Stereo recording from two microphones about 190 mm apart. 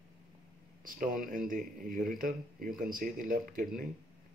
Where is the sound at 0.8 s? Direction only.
45° right (ahead or behind).